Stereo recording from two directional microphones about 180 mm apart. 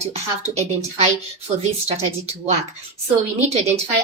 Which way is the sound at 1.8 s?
35° right (ahead or behind).